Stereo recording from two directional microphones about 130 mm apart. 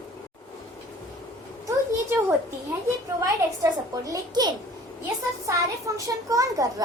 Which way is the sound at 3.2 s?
25° right (ahead or behind).